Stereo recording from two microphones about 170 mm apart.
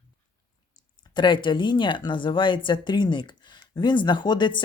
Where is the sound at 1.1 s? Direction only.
30° left (ahead or behind).